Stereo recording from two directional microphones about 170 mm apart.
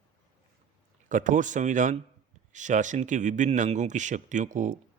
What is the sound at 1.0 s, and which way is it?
Speech, 50° right (ahead or behind).